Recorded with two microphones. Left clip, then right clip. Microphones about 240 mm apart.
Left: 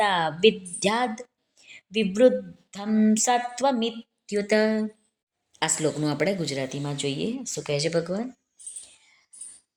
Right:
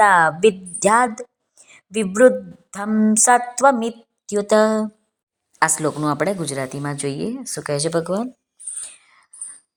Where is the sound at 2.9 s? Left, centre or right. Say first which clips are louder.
Right 3 dB; centre.